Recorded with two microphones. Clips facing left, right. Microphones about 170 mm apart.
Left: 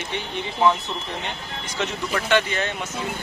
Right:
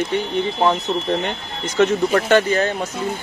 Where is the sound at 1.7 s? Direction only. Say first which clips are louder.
Right 11 dB; 45° right (ahead or behind).